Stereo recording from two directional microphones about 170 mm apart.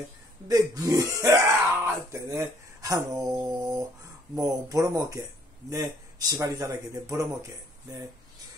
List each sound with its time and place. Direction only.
0.5 s speech: 20° right (ahead or behind)